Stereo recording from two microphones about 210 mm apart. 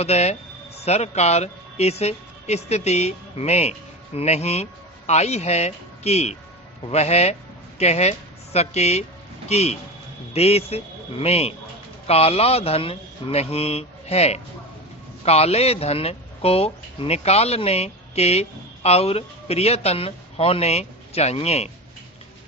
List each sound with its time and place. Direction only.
0.0 s speech: 30° left (ahead or behind)